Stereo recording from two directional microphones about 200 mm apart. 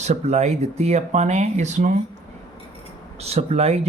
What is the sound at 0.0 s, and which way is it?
Speech, 35° right (ahead or behind).